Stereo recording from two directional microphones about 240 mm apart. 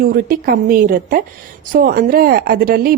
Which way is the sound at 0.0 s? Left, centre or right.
Right.